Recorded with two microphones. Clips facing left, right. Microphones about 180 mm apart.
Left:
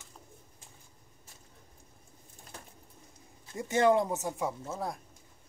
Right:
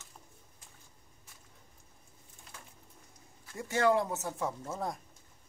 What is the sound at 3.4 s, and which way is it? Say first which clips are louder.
Speech: left 3 dB; 20° left (ahead or behind).